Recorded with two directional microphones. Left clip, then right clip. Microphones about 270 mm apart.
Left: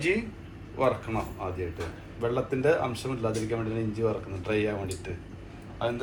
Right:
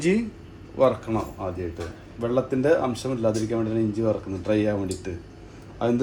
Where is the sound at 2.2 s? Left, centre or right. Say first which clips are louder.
Right 3 dB; right.